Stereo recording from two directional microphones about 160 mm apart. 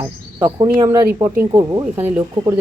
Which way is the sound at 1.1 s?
15° right (ahead or behind).